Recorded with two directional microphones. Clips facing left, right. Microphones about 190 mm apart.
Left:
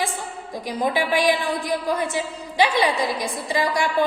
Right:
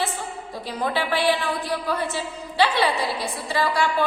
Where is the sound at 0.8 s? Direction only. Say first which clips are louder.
Left 3 dB; 15° left (ahead or behind).